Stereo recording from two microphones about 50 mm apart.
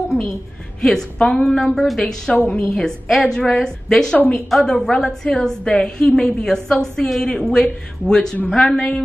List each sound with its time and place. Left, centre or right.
0.7 s a woman's voice: centre
2.3 s a woman's voice: left
3.1 s a woman's voice: centre